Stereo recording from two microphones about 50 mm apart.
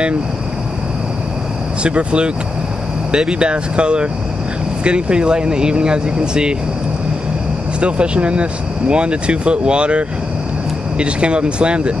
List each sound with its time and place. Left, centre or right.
1.8 s speech: right
7.8 s speech: right